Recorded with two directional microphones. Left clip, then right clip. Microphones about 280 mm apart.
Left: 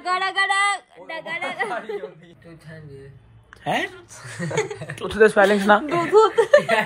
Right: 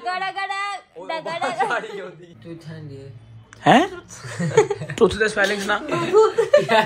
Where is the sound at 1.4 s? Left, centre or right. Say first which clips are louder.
Right 5 dB; right.